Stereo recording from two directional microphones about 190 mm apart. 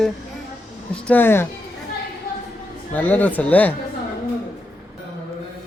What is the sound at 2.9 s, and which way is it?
Speech, 10° left (ahead or behind).